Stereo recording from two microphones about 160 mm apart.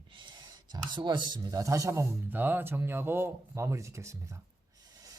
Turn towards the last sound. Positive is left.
turn(degrees=-20)  # may be behind; listen again after turning